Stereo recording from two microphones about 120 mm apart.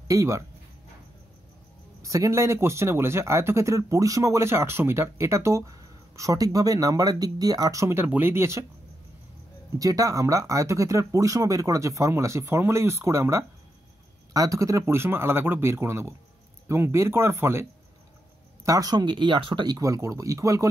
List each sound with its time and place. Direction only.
0.1 s speech: 25° right (ahead or behind)
2.0 s speech: 25° right (ahead or behind)
9.8 s speech: 30° right (ahead or behind)
18.7 s speech: 30° right (ahead or behind)